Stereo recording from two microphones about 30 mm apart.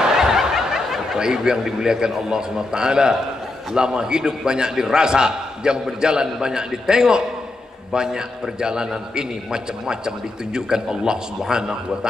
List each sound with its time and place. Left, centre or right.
0.0 s snicker: centre
2.1 s a man's voice: right